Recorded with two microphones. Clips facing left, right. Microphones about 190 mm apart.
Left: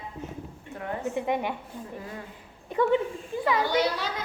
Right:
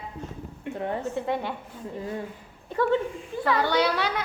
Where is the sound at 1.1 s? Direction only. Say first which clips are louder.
Left 1 dB; 15° left (ahead or behind).